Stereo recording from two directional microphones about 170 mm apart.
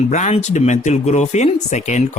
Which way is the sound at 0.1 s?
40° left (ahead or behind).